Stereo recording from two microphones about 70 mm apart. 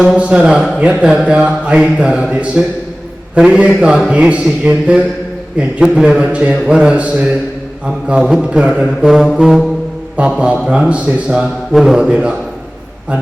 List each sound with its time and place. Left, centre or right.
0.2 s a man's voice: centre
8.4 s a man's voice: centre
9.4 s music: centre
10.2 s a man's voice: centre
11.3 s a man's voice: centre